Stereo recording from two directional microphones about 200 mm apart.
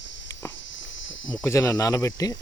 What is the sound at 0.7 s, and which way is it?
Insect, 70° left (ahead or behind).